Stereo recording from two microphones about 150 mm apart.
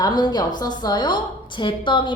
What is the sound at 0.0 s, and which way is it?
A woman's voice, 25° left (ahead or behind).